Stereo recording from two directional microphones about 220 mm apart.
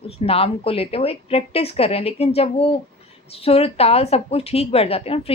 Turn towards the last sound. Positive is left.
turn(degrees=25)  # may be behind; listen again after turning